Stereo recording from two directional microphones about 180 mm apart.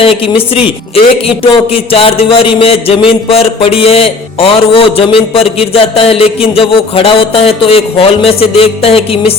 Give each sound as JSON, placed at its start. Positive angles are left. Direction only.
{"t": 0.0, "sound": "a man's voice", "side_deg": 30}